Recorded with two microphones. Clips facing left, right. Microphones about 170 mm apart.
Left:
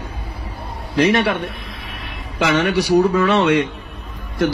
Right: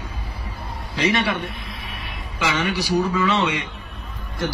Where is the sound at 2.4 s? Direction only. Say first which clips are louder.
Left 6 dB; 65° left (ahead or behind).